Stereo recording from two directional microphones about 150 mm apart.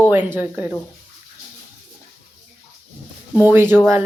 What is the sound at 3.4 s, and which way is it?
Speech, 15° right (ahead or behind).